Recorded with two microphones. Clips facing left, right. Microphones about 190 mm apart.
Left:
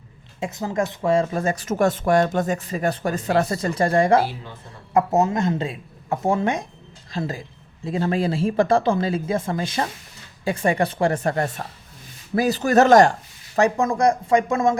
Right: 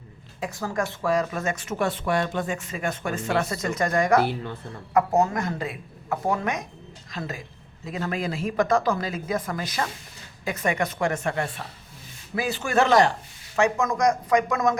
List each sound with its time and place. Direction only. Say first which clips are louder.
0.3 s speech: left 4 dB; 20° left (ahead or behind); by 13.1 s 45° left (ahead or behind)
13.6 s speech: left 3 dB; 35° left (ahead or behind)